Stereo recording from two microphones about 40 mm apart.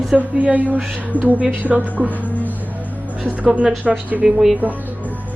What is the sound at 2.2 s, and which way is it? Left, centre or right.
Music, left.